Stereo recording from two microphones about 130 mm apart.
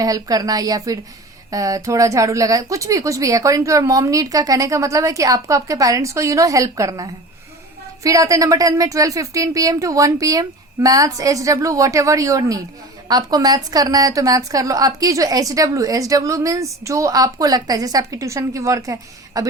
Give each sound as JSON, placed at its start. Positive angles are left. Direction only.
{"t": 0.0, "sound": "a woman's voice", "side_deg": -30}